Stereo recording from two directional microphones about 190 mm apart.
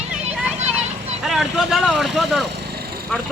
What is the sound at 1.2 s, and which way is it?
Speech, centre (ahead or behind).